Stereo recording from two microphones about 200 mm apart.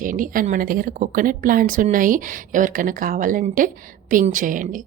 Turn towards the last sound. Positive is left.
turn(degrees=-40)  # may be behind; listen again after turning